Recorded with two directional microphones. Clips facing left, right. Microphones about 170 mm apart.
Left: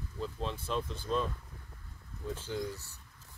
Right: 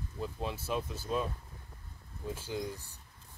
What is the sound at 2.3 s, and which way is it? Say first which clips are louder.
Speech: left 1 dB; 10° right (ahead or behind).